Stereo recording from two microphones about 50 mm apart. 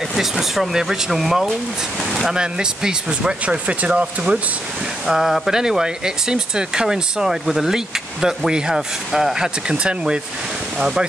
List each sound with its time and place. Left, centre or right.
0.2 s speech: centre; by 4.4 s right
5.0 s speech: centre